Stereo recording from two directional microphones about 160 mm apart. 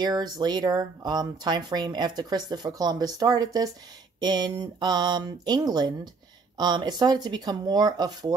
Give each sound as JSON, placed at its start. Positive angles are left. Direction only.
{"t": 0.0, "sound": "speech", "side_deg": -25}